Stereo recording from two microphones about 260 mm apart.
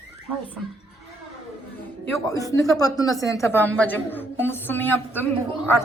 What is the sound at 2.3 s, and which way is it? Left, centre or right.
A woman's voice, centre.